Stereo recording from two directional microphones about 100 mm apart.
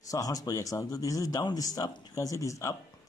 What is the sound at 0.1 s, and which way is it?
Speech, 35° left (ahead or behind).